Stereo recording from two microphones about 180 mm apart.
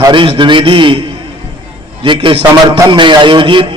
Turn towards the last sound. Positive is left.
turn(degrees=-25)  # may be behind; listen again after turning